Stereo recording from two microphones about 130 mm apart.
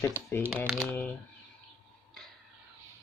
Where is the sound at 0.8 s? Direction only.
15° left (ahead or behind).